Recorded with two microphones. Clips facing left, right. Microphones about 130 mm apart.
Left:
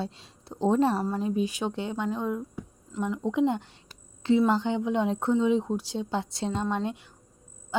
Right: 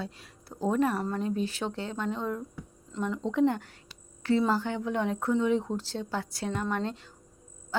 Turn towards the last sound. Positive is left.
turn(degrees=15)  # may be behind; listen again after turning